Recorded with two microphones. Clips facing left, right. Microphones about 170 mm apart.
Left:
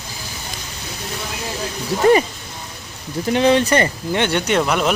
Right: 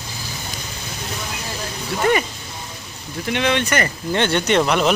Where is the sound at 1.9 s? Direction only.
35° left (ahead or behind).